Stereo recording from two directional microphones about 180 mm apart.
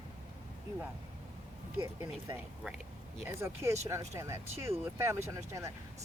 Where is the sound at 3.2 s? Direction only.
15° right (ahead or behind).